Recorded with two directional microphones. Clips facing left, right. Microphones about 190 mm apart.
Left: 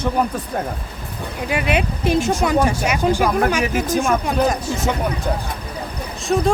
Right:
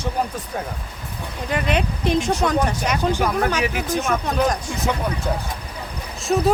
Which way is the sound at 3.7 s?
45° left (ahead or behind).